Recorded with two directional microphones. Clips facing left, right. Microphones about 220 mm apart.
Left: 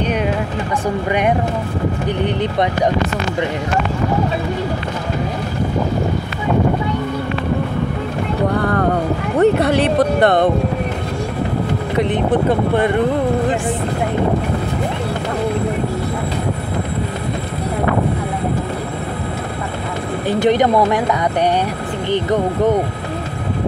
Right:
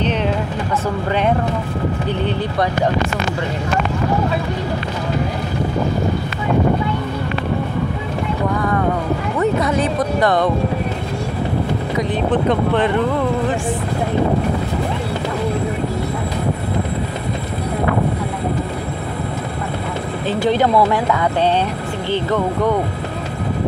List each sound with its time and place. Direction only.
8.5 s speech: 65° left (ahead or behind)
12.1 s speech: 10° left (ahead or behind)
20.2 s speech: 20° left (ahead or behind)